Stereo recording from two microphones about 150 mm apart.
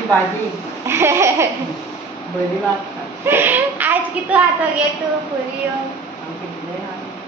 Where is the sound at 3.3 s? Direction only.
15° right (ahead or behind).